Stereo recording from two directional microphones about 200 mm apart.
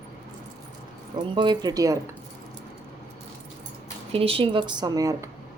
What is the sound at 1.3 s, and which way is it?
Speech, 20° right (ahead or behind).